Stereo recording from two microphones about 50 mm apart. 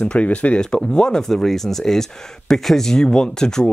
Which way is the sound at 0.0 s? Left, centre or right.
Left.